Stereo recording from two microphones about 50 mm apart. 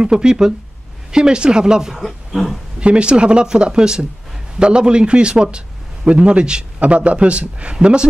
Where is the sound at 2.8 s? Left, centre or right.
Right.